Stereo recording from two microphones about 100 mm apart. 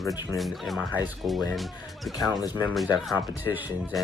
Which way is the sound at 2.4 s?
40° left (ahead or behind).